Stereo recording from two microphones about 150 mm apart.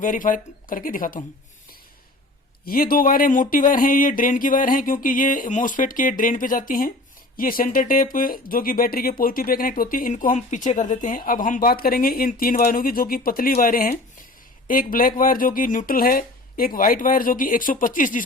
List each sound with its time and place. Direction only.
0.0 s speech: 60° left (ahead or behind)
2.6 s speech: 75° left (ahead or behind)